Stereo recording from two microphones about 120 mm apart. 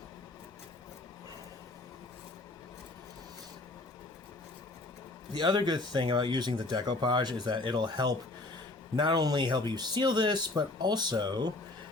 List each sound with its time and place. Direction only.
5.3 s speech: 35° right (ahead or behind)